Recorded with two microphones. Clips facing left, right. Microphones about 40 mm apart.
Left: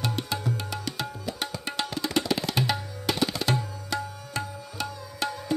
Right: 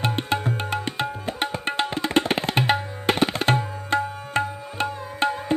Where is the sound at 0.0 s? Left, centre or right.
Right.